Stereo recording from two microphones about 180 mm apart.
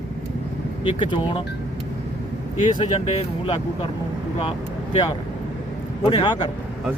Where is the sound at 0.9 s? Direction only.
30° left (ahead or behind).